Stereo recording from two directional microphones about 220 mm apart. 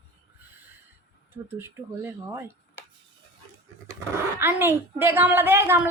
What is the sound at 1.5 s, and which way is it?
Speech, 10° right (ahead or behind).